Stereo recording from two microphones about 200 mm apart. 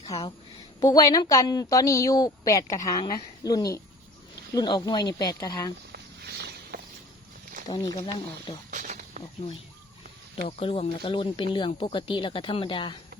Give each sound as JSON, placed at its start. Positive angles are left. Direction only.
{"t": 0.1, "sound": "a woman's voice", "side_deg": 15}
{"t": 5.9, "sound": "walk", "side_deg": -55}
{"t": 7.7, "sound": "speech", "side_deg": 20}
{"t": 8.7, "sound": "snake", "side_deg": -40}
{"t": 10.3, "sound": "speech", "side_deg": 30}